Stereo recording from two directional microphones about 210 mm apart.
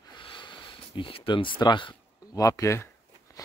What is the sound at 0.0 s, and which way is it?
Sniff, 20° left (ahead or behind).